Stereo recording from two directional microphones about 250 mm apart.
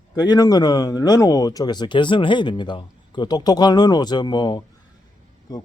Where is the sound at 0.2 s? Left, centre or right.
Centre.